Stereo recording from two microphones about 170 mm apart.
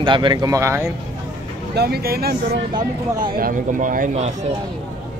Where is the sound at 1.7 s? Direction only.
70° right (ahead or behind).